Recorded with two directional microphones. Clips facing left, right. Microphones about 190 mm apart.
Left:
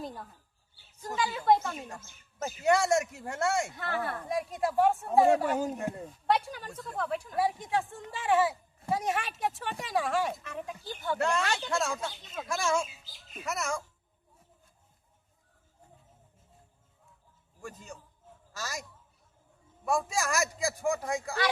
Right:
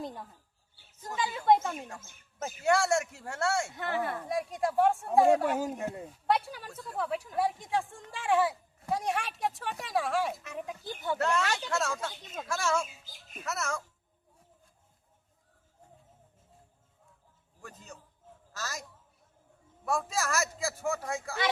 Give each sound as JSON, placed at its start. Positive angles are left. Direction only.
{"t": 0.0, "sound": "speech", "side_deg": -20}
{"t": 1.5, "sound": "speech", "side_deg": -20}
{"t": 2.6, "sound": "speech", "side_deg": 20}
{"t": 3.8, "sound": "speech", "side_deg": -20}
{"t": 4.3, "sound": "speech", "side_deg": 0}
{"t": 10.4, "sound": "speech", "side_deg": -15}
{"t": 11.2, "sound": "speech", "side_deg": 10}
{"t": 17.6, "sound": "a man's voice", "side_deg": 10}
{"t": 19.8, "sound": "speech", "side_deg": 15}